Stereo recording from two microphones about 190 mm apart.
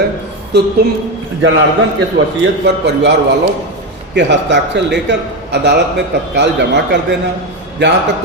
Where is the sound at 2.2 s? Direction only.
75° right (ahead or behind).